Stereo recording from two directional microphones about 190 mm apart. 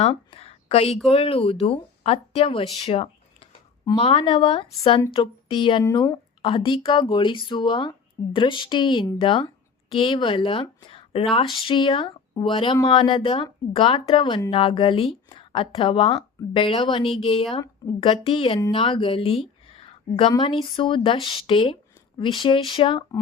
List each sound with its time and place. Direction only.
0.0 s a sound: 30° left (ahead or behind)
1.1 s a woman's voice: 30° left (ahead or behind)
6.4 s a woman's voice: 30° left (ahead or behind)